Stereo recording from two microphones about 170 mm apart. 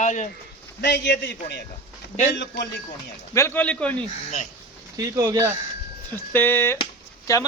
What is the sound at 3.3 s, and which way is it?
Speech, 15° left (ahead or behind).